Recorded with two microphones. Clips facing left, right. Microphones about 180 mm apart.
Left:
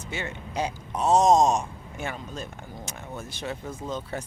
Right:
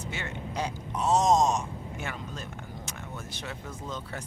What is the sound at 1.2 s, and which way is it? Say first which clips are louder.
Speech: left 4 dB; 10° left (ahead or behind).